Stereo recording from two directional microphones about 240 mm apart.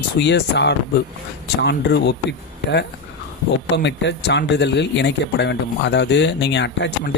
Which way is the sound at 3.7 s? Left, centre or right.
Left.